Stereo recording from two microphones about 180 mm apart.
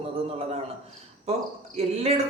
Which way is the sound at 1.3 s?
35° right (ahead or behind).